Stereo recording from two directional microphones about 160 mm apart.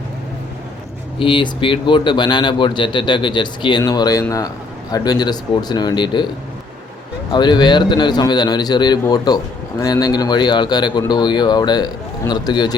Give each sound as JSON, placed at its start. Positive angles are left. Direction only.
{"t": 1.2, "sound": "a man's voice", "side_deg": 30}
{"t": 7.3, "sound": "a man's voice", "side_deg": 30}